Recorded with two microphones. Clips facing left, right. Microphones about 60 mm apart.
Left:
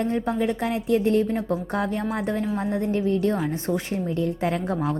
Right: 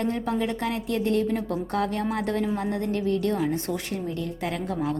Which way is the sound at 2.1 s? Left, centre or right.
Centre.